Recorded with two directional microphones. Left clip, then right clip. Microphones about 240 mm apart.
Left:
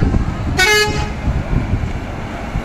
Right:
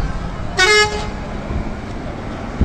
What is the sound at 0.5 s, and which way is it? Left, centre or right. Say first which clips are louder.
Vehicle: even; centre.